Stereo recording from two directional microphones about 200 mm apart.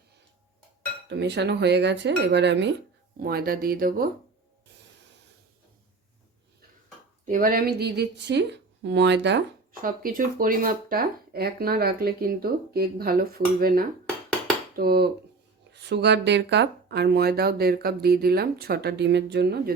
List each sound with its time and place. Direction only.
1.1 s speech: 55° right (ahead or behind)
3.2 s speech: 50° right (ahead or behind)
7.3 s speech: 45° right (ahead or behind); by 9.4 s 60° right (ahead or behind)
9.8 s speech: 45° right (ahead or behind)